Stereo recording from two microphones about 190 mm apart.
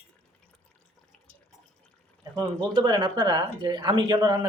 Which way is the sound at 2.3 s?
25° right (ahead or behind).